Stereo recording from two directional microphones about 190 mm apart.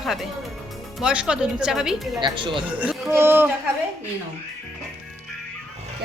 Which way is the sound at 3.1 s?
10° right (ahead or behind).